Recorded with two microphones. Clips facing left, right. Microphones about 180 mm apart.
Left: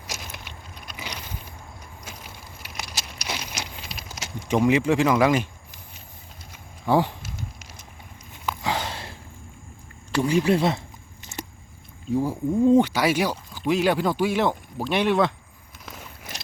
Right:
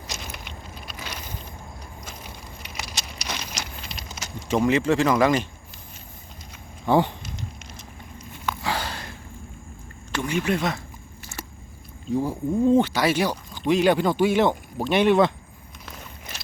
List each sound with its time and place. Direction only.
0.1 s keys jangling: centre (ahead or behind)
0.9 s vehicle: 15° left (ahead or behind)
2.6 s keys jangling: 5° left (ahead or behind)
4.4 s speech: 10° left (ahead or behind)
6.8 s a sound: 5° left (ahead or behind)
8.4 s sniff: 20° left (ahead or behind)
10.2 s a sound: 35° left (ahead or behind)
12.1 s speech: 10° left (ahead or behind)